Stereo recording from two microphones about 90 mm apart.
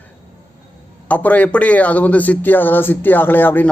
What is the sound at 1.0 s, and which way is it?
A man's voice, 15° left (ahead or behind).